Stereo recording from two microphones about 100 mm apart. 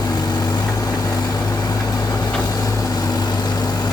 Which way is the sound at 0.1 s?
40° left (ahead or behind).